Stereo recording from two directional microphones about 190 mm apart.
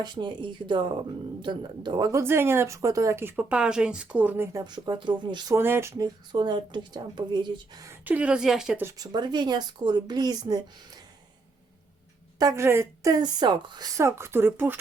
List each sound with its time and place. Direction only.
0.0 s speech: 25° right (ahead or behind)
4.6 s speech: 20° right (ahead or behind)
5.5 s speech: 10° right (ahead or behind)
6.3 s speech: 25° right (ahead or behind); by 8.9 s 5° right (ahead or behind)
9.0 s speech: 20° right (ahead or behind)
12.4 s speech: 15° right (ahead or behind)